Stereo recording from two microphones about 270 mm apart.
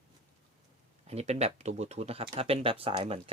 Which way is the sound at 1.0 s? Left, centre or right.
Right.